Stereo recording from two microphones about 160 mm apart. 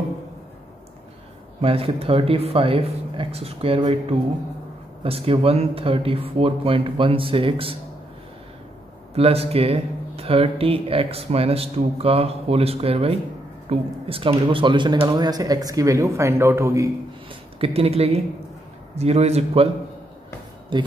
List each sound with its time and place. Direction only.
1.6 s speech: 35° right (ahead or behind)
9.1 s speech: 40° right (ahead or behind); by 16.9 s 20° right (ahead or behind)
17.6 s speech: 40° right (ahead or behind)
20.7 s speech: 30° right (ahead or behind)